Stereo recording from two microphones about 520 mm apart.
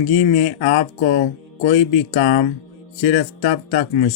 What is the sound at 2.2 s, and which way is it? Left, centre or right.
Speech, centre.